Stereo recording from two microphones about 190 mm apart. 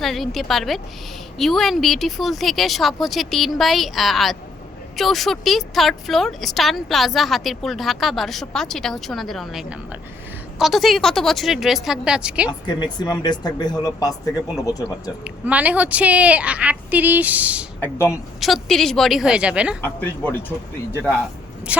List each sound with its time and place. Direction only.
0.0 s a woman's voice: centre (ahead or behind)
12.5 s speech: 25° left (ahead or behind)
15.2 s a woman's voice: 5° right (ahead or behind)
17.7 s speech: 10° left (ahead or behind)
18.3 s a woman's voice: centre (ahead or behind)
19.8 s speech: 10° left (ahead or behind)
21.7 s a woman's voice: 5° right (ahead or behind)